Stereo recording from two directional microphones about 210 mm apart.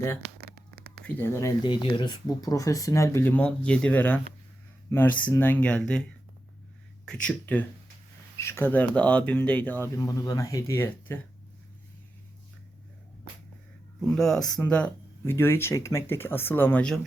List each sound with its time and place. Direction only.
0.3 s a sound: 45° right (ahead or behind)
1.0 s speech: 10° left (ahead or behind)
14.2 s speech: centre (ahead or behind)